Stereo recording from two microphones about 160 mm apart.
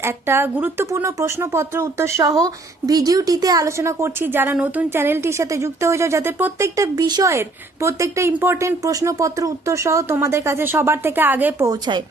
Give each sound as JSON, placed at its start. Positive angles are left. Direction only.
{"t": 0.0, "sound": "speech", "side_deg": -15}
{"t": 11.7, "sound": "speech", "side_deg": -30}